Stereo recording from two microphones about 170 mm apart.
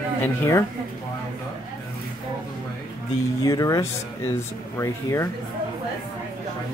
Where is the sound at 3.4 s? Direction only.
20° left (ahead or behind).